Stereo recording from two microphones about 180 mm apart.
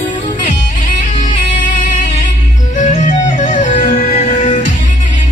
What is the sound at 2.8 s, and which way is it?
Music, 45° left (ahead or behind).